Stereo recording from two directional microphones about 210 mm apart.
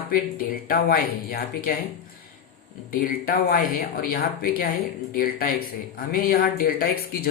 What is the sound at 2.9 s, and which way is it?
Speech, 40° left (ahead or behind).